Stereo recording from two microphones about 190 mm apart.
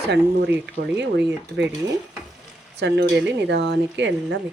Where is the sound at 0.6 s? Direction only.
65° right (ahead or behind).